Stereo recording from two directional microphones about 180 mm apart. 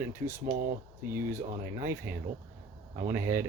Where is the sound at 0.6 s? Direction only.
50° right (ahead or behind).